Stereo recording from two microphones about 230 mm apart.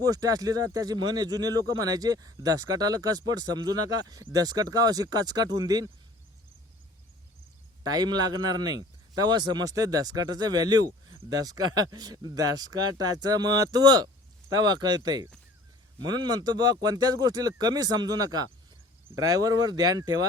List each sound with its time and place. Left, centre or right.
0.0 s speech: centre
7.9 s speech: centre